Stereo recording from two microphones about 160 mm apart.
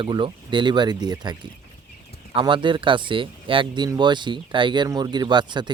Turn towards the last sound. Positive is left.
turn(degrees=-30)  # may be behind; listen again after turning